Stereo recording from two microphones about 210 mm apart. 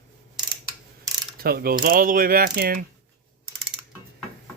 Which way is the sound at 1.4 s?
45° right (ahead or behind).